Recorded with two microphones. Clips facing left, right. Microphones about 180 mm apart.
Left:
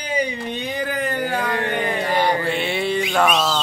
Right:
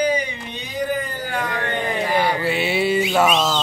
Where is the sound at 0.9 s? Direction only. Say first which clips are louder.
Left 2 dB; 80° left.